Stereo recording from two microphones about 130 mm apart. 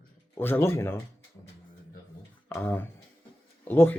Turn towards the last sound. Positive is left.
turn(degrees=15)  # may be behind; listen again after turning